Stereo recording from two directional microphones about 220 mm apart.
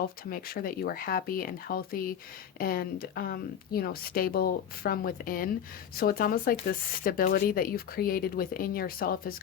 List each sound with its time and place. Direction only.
0.3 s speech: 45° left (ahead or behind)